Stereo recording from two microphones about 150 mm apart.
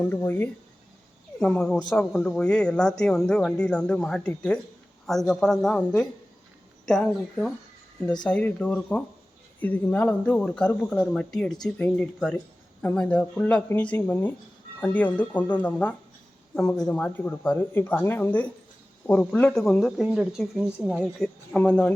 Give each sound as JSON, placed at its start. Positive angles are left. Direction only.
{"t": 0.0, "sound": "speech", "side_deg": 10}
{"t": 21.5, "sound": "speech", "side_deg": 10}